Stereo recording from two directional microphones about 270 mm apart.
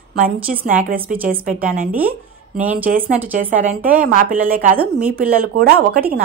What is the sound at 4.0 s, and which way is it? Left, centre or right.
A woman's voice, right.